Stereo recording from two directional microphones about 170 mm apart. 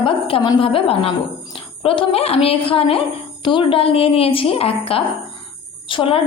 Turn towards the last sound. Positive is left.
turn(degrees=30)  # may be behind; listen again after turning